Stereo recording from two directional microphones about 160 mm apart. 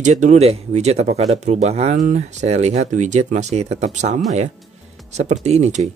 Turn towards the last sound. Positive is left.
turn(degrees=-45)  # may be behind; listen again after turning